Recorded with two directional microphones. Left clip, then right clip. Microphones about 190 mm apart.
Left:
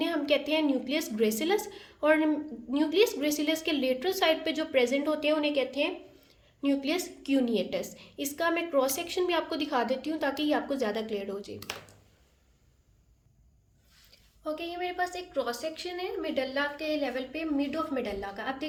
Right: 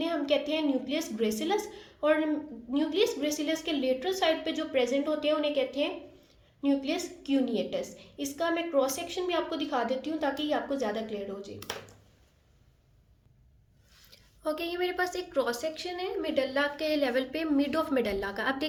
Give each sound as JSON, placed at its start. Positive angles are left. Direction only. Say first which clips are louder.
{"t": 0.0, "sound": "a woman's voice", "louder": "left 1 dB", "side_deg": 35}
{"t": 14.4, "sound": "a woman's voice", "louder": "right 3 dB", "side_deg": -30}
{"t": 15.7, "sound": "a woman's voice", "louder": "right 1 dB", "side_deg": 5}
{"t": 16.7, "sound": "a woman's voice", "louder": "right 3 dB", "side_deg": -30}